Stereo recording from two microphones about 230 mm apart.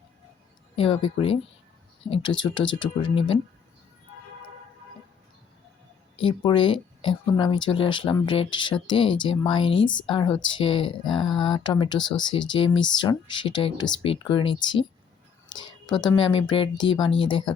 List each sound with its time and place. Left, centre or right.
0.8 s speech: left
6.1 s a woman's voice: left